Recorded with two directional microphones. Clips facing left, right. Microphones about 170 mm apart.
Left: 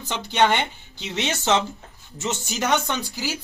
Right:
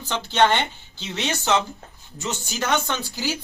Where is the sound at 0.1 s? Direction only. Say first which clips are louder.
Right 1 dB; 10° left (ahead or behind).